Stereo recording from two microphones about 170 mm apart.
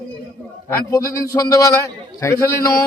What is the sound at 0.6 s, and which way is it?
A man's voice, 20° left (ahead or behind).